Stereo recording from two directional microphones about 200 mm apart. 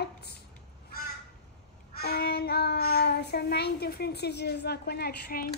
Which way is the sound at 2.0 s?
50° left (ahead or behind).